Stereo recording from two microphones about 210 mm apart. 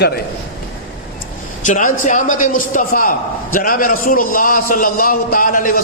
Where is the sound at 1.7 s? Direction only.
35° left (ahead or behind).